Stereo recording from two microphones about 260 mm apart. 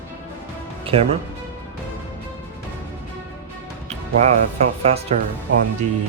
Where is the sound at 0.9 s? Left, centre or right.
Right.